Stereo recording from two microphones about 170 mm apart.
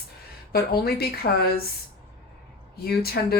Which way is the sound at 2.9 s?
65° left (ahead or behind).